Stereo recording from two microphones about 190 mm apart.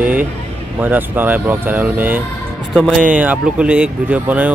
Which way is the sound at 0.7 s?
10° right (ahead or behind).